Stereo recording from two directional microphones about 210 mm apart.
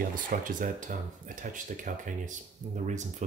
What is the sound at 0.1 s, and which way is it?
Speech, 40° right (ahead or behind).